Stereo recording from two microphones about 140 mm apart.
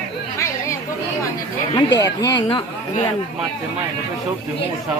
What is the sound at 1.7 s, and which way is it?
Speech, 30° left (ahead or behind).